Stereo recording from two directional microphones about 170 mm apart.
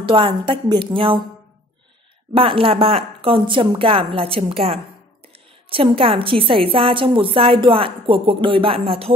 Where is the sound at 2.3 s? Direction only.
30° right (ahead or behind).